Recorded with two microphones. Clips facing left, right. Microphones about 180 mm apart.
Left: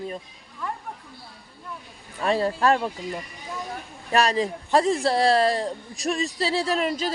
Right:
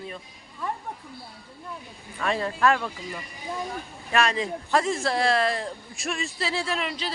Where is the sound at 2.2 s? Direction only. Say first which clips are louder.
Left 2 dB; 35° left (ahead or behind).